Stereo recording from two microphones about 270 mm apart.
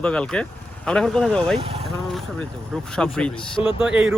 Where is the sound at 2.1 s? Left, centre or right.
Centre.